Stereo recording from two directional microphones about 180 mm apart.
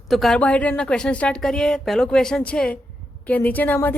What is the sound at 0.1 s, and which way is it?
A woman's voice, centre (ahead or behind).